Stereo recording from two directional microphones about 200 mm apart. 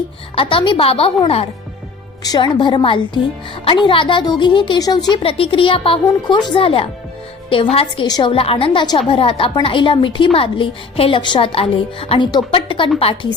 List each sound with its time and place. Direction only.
0.3 s a woman's voice: 25° left (ahead or behind)